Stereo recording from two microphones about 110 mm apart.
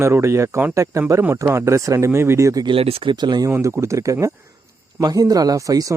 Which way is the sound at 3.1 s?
40° right (ahead or behind).